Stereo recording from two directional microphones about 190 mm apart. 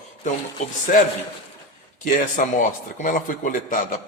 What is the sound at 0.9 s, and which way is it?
Speech, 45° left (ahead or behind).